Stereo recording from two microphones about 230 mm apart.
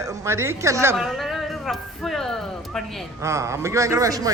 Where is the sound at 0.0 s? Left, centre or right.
Centre.